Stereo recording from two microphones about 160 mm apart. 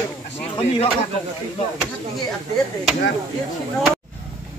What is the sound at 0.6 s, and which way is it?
Speech, 40° left (ahead or behind).